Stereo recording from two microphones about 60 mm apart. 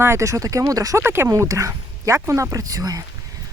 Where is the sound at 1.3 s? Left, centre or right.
Right.